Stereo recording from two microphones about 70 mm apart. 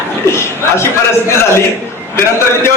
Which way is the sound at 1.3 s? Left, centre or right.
Left.